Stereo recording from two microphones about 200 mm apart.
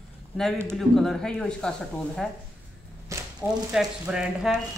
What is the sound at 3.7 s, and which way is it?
Speech, 5° right (ahead or behind).